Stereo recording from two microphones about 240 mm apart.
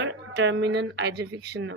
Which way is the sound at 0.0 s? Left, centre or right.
Right.